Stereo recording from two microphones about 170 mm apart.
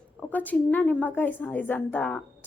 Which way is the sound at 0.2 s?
10° left (ahead or behind).